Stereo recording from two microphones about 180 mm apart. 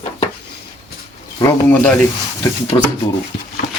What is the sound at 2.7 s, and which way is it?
Speech, 25° left (ahead or behind).